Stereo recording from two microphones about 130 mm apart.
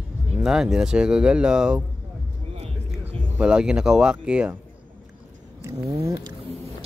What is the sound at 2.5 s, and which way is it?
Music, 50° right (ahead or behind).